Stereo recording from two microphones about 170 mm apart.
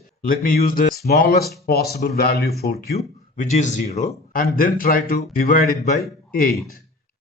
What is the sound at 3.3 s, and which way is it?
Speech, 45° left (ahead or behind).